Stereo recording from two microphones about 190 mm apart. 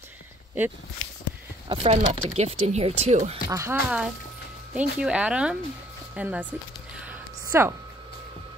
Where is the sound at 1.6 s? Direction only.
35° right (ahead or behind).